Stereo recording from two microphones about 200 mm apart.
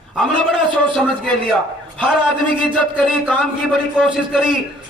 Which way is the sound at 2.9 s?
5° right (ahead or behind).